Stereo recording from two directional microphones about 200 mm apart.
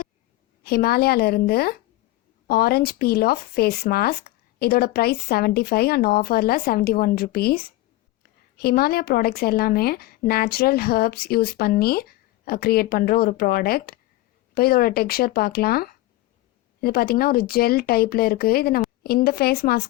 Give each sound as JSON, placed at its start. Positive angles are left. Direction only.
{"t": 0.6, "sound": "a woman's voice", "side_deg": 50}